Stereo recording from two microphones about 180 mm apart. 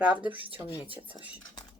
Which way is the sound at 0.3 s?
30° right (ahead or behind).